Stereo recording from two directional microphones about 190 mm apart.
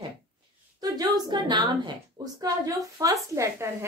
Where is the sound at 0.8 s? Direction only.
20° right (ahead or behind).